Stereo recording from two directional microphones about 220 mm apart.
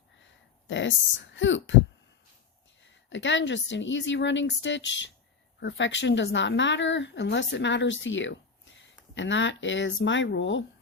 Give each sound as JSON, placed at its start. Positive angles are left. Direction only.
{"t": 0.7, "sound": "speech", "side_deg": 55}
{"t": 2.8, "sound": "speech", "side_deg": 55}